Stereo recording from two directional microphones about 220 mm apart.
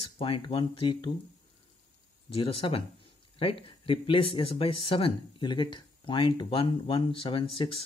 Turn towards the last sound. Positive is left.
turn(degrees=25)  # may be behind; listen again after turning